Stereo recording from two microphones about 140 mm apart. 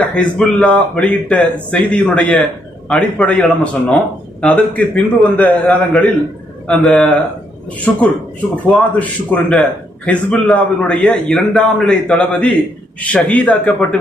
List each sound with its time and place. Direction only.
0.1 s speech: 5° left (ahead or behind)